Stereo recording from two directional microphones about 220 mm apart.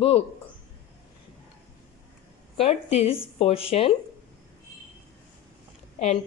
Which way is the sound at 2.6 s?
25° left (ahead or behind).